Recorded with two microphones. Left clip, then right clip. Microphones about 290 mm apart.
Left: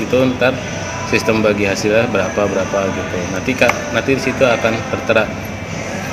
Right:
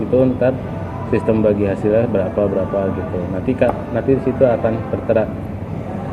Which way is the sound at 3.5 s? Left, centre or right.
Centre.